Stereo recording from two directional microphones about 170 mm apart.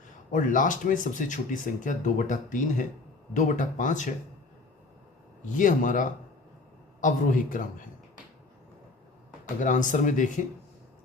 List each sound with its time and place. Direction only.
0.3 s speech: 50° left (ahead or behind)
5.5 s speech: 50° left (ahead or behind)
9.6 s speech: 50° left (ahead or behind)